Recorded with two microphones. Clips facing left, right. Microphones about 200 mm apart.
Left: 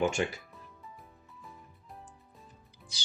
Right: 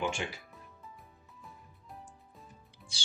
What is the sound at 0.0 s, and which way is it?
Speech, 45° left (ahead or behind).